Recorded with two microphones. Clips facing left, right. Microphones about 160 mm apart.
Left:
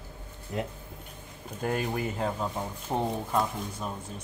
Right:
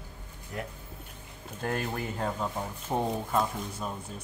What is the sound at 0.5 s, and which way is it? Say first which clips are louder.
Speech: left 5 dB; 20° left (ahead or behind).